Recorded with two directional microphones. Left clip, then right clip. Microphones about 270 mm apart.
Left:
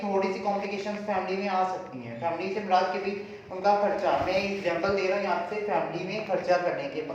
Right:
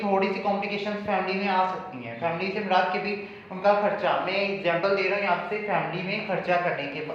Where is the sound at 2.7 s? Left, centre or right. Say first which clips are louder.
Right 1 dB; right.